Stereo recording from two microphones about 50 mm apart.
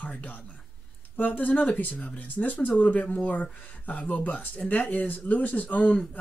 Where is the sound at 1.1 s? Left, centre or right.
Left.